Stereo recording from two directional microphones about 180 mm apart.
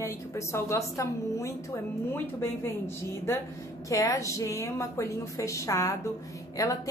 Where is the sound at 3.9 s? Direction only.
15° left (ahead or behind).